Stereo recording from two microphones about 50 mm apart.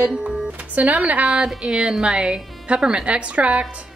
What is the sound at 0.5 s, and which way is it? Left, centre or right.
Speech, right.